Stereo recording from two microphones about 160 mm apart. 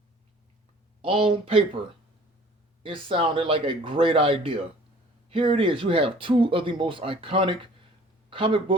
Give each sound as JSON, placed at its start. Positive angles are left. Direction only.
{"t": 1.0, "sound": "speech", "side_deg": -35}
{"t": 2.8, "sound": "speech", "side_deg": -35}